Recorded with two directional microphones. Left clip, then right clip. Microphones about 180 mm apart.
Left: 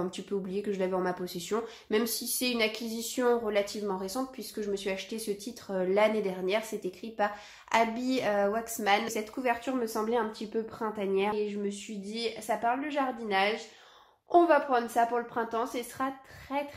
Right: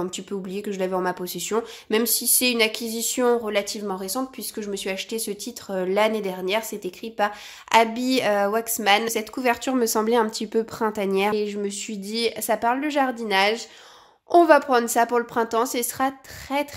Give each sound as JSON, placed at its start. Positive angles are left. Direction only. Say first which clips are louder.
{"t": 0.0, "sound": "a woman's voice", "louder": "right 4 dB", "side_deg": -35}